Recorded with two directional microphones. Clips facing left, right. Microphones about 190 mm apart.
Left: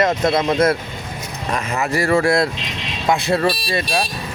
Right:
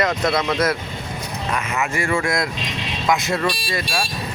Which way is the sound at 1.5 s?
35° left (ahead or behind).